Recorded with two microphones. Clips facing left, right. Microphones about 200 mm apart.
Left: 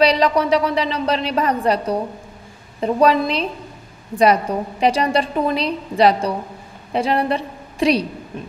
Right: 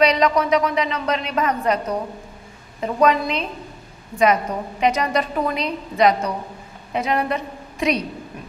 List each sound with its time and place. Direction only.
0.0 s a woman's voice: 35° left (ahead or behind)